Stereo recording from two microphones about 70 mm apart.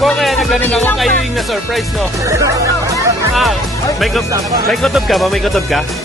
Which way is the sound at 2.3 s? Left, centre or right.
Right.